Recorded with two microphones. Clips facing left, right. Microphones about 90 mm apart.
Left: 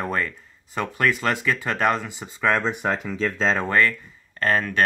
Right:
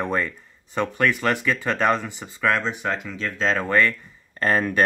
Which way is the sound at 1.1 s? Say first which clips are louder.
Right 1 dB; 15° left (ahead or behind).